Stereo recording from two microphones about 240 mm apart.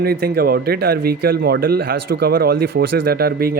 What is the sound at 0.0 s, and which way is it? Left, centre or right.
Speech, right.